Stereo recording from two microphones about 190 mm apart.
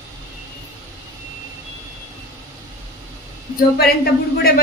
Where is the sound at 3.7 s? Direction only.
55° left (ahead or behind).